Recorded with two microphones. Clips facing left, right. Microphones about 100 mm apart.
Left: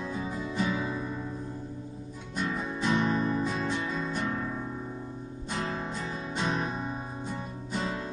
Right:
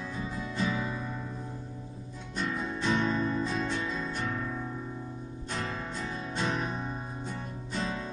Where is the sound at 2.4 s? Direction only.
10° left (ahead or behind).